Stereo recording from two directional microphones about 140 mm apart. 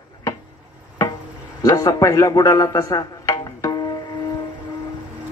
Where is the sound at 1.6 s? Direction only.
25° left (ahead or behind).